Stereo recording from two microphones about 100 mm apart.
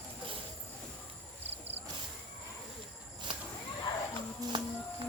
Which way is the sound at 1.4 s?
85° right.